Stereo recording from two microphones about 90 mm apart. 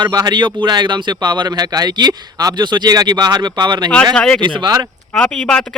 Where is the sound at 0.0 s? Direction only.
45° right (ahead or behind).